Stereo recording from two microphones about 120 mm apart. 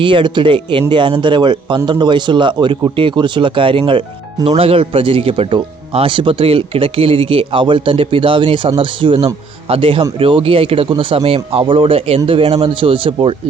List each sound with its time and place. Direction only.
0.0 s speech: 45° right (ahead or behind)
4.4 s speech: 55° right (ahead or behind)